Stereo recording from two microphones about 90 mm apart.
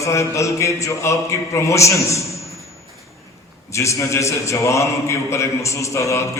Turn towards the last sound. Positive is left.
turn(degrees=35)  # may be behind; listen again after turning